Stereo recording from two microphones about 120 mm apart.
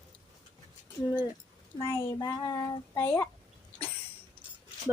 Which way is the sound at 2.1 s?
35° left (ahead or behind).